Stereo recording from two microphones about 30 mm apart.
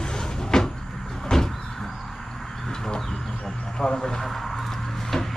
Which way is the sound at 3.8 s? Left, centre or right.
Left.